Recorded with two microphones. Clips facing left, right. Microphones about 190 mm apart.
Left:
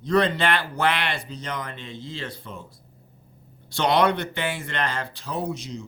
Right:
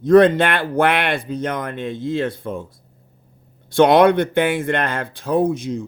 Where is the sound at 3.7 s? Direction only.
55° right (ahead or behind).